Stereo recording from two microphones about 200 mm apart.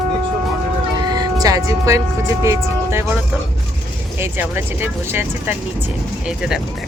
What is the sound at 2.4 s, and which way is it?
Speech, 15° right (ahead or behind).